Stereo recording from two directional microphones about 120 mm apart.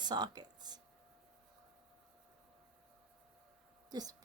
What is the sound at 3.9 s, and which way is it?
Speech, 35° right (ahead or behind).